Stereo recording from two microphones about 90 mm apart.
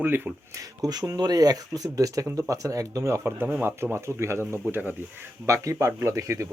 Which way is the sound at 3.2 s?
20° right (ahead or behind).